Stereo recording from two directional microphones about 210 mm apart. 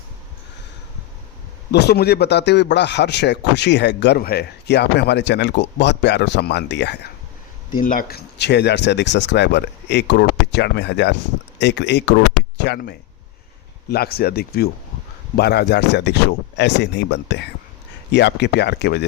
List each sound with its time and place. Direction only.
1.7 s a man's voice: 50° left (ahead or behind)
7.8 s a man's voice: 40° left (ahead or behind)